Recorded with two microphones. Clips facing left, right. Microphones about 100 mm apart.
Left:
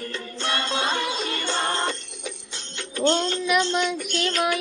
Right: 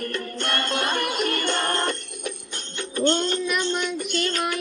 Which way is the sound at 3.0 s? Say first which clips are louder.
Even; 90° left.